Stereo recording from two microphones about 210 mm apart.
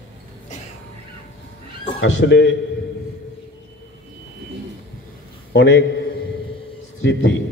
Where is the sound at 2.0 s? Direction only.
60° left (ahead or behind).